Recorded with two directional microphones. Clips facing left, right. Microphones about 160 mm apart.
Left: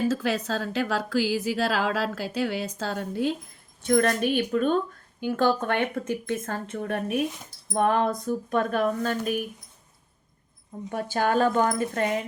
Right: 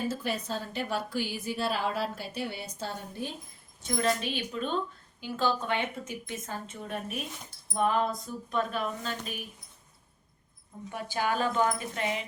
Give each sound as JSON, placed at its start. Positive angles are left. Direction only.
{"t": 0.1, "sound": "a woman's voice", "side_deg": 90}
{"t": 3.8, "sound": "a woman's voice", "side_deg": 60}
{"t": 10.9, "sound": "speech", "side_deg": 50}